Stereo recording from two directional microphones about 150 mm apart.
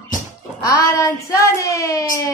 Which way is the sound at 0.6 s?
20° left (ahead or behind).